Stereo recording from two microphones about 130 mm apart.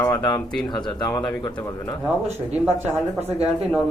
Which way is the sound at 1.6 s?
20° left (ahead or behind).